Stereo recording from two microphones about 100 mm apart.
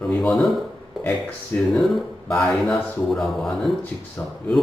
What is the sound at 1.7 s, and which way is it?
Speech, centre (ahead or behind).